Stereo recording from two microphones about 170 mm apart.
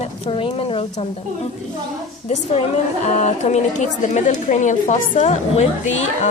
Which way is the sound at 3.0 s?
40° left (ahead or behind).